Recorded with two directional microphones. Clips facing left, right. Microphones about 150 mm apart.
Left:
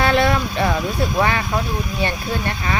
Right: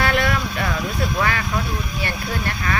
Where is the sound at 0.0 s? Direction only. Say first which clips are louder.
Left 4 dB; 25° left (ahead or behind).